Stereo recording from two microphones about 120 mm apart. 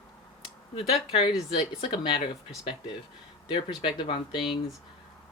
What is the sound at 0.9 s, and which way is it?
Speech, 55° left (ahead or behind).